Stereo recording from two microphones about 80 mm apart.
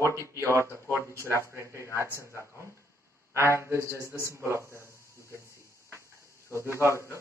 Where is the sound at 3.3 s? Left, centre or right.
Right.